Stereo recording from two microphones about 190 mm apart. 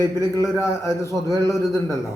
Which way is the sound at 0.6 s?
15° left (ahead or behind).